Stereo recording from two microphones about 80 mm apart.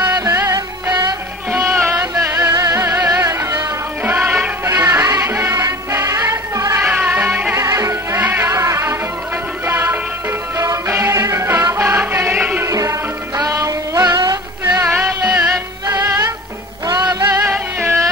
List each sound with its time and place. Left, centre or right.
0.0 s music: right
0.3 s music: right
4.0 s music: right
4.6 s music: right
6.8 s music: right
7.5 s music: right
8.2 s music: right
9.7 s music: right
12.6 s music: right
13.4 s synthetic singing: right
14.6 s music: right
15.2 s music: centre
15.9 s music: right
17.5 s music: right